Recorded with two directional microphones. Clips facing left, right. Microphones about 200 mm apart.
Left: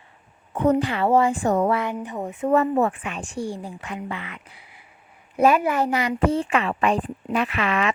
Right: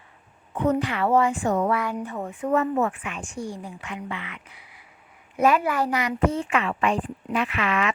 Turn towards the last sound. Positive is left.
turn(degrees=35)  # may be behind; listen again after turning